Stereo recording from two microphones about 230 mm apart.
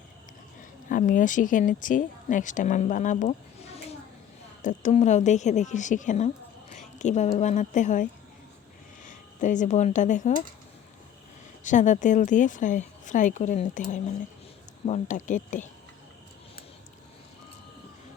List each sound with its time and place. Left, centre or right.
0.9 s speech: left
9.0 s speech: left
11.6 s speech: left